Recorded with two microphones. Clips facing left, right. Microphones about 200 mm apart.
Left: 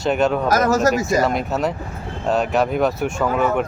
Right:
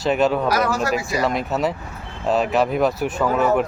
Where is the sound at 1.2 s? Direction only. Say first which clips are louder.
Left 1 dB; centre (ahead or behind).